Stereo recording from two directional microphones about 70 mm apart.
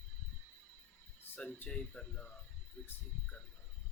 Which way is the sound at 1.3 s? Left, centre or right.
Left.